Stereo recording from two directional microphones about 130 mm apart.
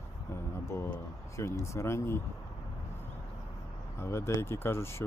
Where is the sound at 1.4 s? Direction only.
20° left (ahead or behind).